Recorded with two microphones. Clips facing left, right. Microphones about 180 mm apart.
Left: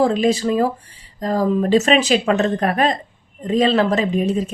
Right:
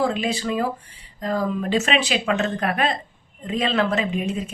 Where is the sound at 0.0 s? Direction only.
40° left (ahead or behind).